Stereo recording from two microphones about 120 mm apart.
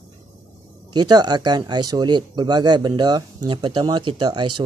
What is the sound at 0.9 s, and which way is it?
Speech, 35° right (ahead or behind).